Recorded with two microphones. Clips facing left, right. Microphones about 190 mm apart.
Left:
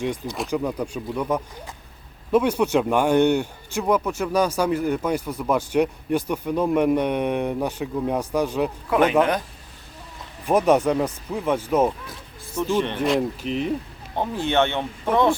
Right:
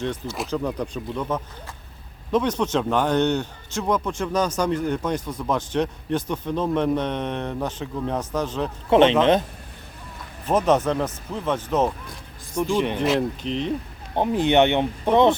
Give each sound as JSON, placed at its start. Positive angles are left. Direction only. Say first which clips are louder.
{"t": 0.0, "sound": "speech", "louder": "left 1 dB", "side_deg": 15}
{"t": 8.9, "sound": "speech", "louder": "right 5 dB", "side_deg": -25}
{"t": 10.4, "sound": "speech", "louder": "left 2 dB", "side_deg": 10}
{"t": 12.5, "sound": "speech", "louder": "right 1 dB", "side_deg": -10}
{"t": 13.0, "sound": "speech", "louder": "even", "side_deg": 5}
{"t": 14.2, "sound": "speech", "louder": "right 4 dB", "side_deg": -20}